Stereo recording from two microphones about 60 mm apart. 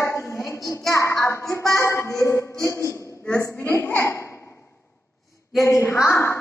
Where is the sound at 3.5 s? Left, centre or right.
Left.